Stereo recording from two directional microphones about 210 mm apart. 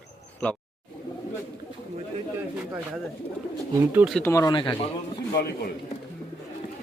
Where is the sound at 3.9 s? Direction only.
10° right (ahead or behind).